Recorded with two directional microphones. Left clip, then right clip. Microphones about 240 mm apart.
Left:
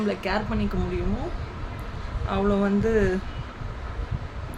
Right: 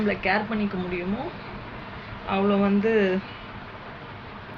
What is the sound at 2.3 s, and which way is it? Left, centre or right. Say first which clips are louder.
Speech: right 1 dB; centre.